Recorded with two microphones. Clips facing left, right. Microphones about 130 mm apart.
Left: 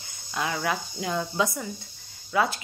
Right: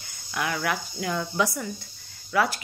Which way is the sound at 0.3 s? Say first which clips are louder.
Even; 20° left (ahead or behind).